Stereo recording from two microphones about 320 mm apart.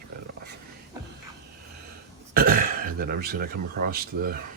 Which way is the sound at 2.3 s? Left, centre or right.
Right.